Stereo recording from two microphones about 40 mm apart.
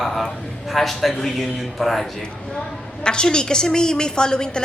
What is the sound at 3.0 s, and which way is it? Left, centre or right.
A woman's voice, left.